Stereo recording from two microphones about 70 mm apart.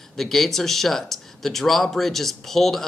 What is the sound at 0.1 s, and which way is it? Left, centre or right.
Speech, centre.